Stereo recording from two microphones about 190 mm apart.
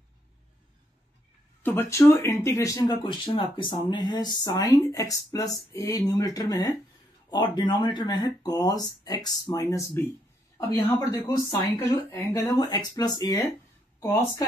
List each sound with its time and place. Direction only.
1.6 s speech: 10° left (ahead or behind)